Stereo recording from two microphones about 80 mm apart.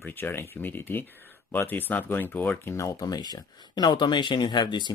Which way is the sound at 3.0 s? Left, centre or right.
Left.